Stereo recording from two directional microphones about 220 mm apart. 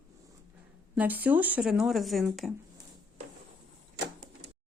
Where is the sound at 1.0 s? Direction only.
5° right (ahead or behind).